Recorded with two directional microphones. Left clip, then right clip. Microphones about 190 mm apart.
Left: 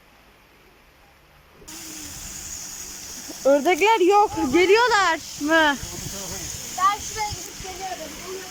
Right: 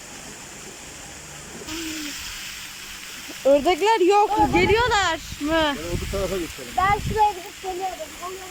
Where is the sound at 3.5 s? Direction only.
Centre (ahead or behind).